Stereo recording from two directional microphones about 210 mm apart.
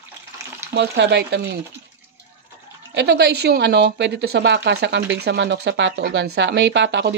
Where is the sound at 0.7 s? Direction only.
55° right (ahead or behind).